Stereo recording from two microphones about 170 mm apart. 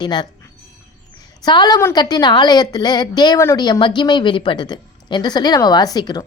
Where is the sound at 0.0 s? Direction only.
25° left (ahead or behind).